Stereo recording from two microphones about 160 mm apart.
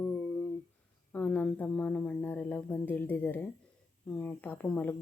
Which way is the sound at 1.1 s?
10° left (ahead or behind).